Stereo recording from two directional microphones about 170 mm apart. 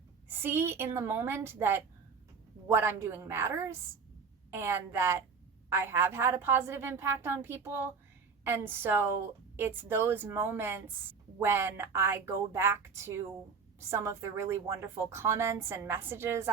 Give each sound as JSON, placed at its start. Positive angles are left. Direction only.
{"t": 0.3, "sound": "a woman's voice", "side_deg": -15}